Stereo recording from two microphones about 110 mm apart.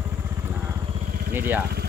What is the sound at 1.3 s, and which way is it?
Speech, 20° right (ahead or behind).